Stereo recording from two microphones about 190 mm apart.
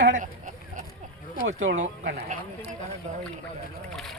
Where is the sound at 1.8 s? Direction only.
40° right (ahead or behind).